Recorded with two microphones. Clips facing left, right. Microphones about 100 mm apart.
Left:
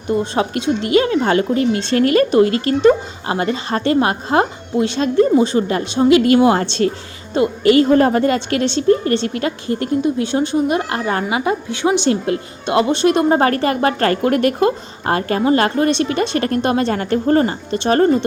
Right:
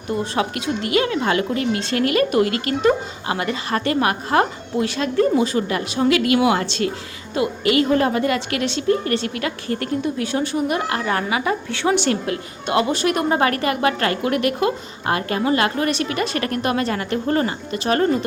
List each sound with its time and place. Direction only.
0.1 s a woman's voice: 25° left (ahead or behind)